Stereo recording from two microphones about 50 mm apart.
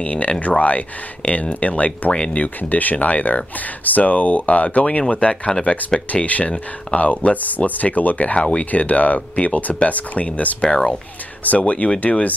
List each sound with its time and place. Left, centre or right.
0.0 s speech: left
6.2 s speech: left
10.6 s speech: centre
11.4 s speech: left